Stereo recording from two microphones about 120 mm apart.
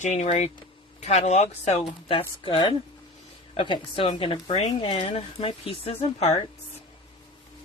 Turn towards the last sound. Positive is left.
turn(degrees=65)  # may be behind; listen again after turning